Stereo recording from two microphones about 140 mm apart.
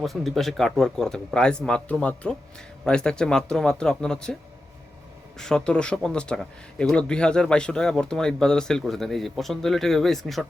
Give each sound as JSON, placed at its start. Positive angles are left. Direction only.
{"t": 0.0, "sound": "speech", "side_deg": 0}
{"t": 5.4, "sound": "speech", "side_deg": 5}